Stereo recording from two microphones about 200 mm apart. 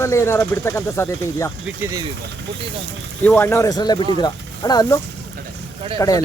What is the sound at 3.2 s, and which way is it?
Speech, 10° left (ahead or behind).